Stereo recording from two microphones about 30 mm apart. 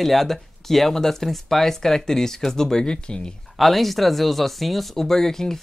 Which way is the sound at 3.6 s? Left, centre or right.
Centre.